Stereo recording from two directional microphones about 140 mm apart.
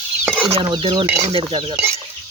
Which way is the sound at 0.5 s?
35° right (ahead or behind).